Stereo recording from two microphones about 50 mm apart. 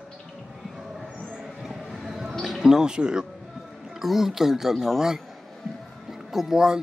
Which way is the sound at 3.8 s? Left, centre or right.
Centre.